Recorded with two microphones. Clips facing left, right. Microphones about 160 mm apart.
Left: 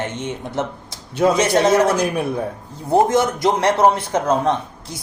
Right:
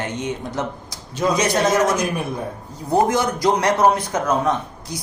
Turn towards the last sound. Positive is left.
turn(degrees=30)  # may be behind; listen again after turning